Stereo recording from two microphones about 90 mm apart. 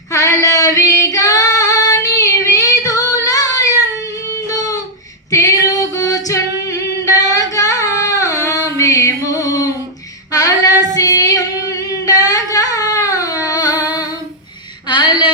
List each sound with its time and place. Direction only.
0.1 s female singing: 35° left (ahead or behind)
4.3 s guitar: 40° left (ahead or behind)
5.3 s female singing: 40° left (ahead or behind)
14.8 s a sound: 60° left (ahead or behind)